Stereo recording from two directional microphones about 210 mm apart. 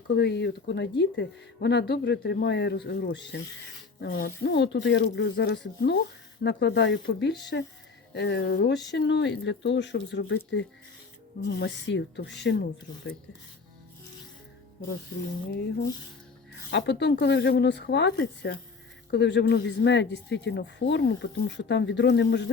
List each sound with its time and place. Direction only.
0.1 s speech: 55° left (ahead or behind)
12.9 s speech: 40° left (ahead or behind)
16.7 s speech: 55° left (ahead or behind)